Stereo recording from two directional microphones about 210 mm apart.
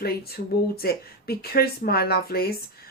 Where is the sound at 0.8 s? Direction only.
45° left (ahead or behind).